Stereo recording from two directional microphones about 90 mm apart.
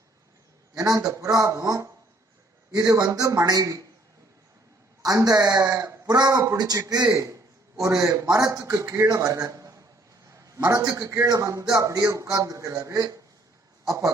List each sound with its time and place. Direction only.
0.8 s a man's voice: 40° right (ahead or behind)
5.0 s a man's voice: 45° right (ahead or behind)